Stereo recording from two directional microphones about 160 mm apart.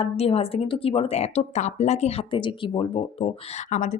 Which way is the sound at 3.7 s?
50° left (ahead or behind).